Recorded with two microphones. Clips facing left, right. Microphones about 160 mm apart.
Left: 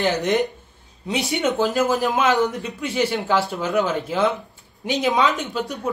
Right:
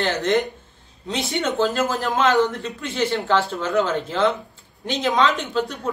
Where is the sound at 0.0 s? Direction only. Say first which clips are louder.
Left 1 dB; 10° left (ahead or behind).